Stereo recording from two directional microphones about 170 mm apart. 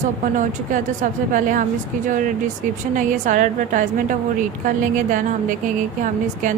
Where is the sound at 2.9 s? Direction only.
50° right (ahead or behind).